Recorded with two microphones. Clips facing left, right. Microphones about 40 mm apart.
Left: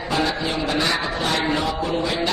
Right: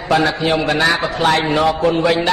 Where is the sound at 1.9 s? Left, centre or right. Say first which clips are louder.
Right 8 dB; right.